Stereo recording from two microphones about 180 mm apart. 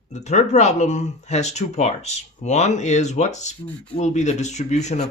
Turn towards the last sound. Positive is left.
turn(degrees=40)  # may be behind; listen again after turning